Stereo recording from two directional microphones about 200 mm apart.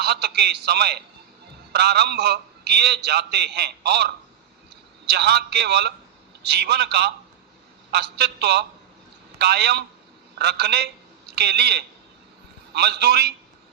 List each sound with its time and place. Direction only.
0.0 s a man's voice: 55° right (ahead or behind)